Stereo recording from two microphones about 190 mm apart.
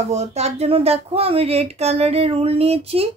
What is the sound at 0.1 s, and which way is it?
Speech, 35° right (ahead or behind).